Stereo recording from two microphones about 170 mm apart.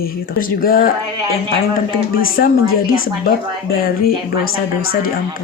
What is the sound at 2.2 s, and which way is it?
Speech, 60° left (ahead or behind).